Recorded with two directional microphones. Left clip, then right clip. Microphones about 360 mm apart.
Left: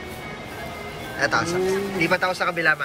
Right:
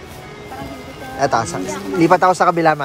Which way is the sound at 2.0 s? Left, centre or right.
Centre.